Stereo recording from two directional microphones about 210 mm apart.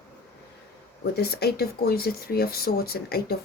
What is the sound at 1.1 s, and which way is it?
Speech, 50° left (ahead or behind).